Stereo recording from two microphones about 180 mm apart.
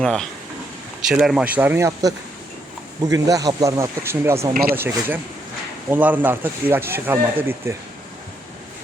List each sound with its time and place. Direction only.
0.0 s speech: 5° left (ahead or behind); by 7.8 s 15° right (ahead or behind)